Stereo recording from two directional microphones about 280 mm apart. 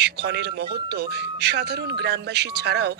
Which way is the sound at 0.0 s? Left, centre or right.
Right.